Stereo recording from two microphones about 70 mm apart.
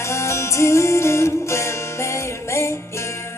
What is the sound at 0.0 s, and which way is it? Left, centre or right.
Music, left.